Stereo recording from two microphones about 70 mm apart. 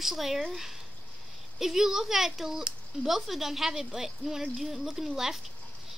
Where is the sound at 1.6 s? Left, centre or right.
Centre.